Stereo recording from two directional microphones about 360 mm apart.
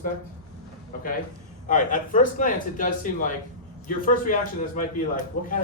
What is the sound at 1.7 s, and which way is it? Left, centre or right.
Speech, left.